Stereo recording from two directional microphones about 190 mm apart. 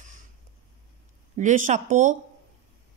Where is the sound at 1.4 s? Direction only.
40° right (ahead or behind).